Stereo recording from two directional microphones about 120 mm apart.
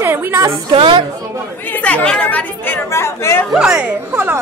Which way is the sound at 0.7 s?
45° right (ahead or behind).